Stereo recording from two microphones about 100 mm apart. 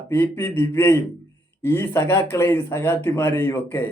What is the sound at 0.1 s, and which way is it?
Speech, 20° left (ahead or behind).